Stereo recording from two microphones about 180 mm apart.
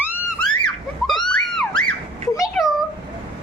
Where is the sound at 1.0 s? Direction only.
Centre (ahead or behind).